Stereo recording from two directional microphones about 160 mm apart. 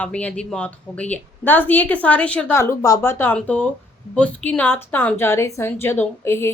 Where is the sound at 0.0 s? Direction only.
10° left (ahead or behind).